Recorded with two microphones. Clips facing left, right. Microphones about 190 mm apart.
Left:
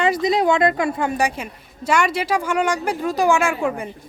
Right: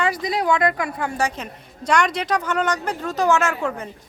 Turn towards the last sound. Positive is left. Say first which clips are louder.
# left 2 dB
turn(degrees=10)  # may be behind; listen again after turning